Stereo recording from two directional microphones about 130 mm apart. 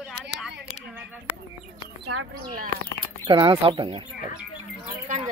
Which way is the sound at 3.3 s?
40° right (ahead or behind).